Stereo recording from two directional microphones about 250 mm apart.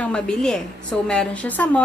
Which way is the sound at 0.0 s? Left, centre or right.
Centre.